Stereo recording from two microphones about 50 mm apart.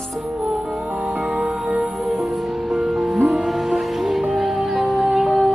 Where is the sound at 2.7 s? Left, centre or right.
Centre.